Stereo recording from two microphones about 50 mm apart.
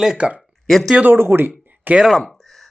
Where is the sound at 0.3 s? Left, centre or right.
Centre.